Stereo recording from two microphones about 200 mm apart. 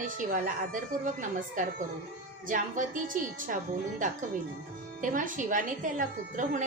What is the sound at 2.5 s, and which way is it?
A woman's voice, 40° right (ahead or behind).